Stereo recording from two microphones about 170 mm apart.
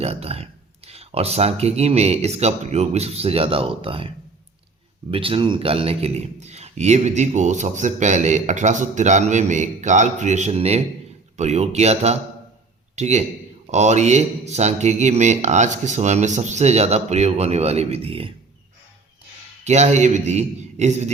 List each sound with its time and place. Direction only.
0.0 s speech: 35° right (ahead or behind)
5.1 s speech: 30° right (ahead or behind)
19.6 s speech: 40° right (ahead or behind)